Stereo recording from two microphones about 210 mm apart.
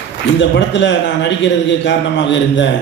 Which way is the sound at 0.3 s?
55° left (ahead or behind).